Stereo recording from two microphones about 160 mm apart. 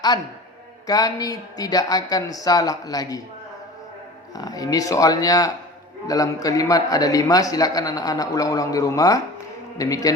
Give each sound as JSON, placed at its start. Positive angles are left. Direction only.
{"t": 0.9, "sound": "a man's voice", "side_deg": 25}
{"t": 4.4, "sound": "a man's voice", "side_deg": 25}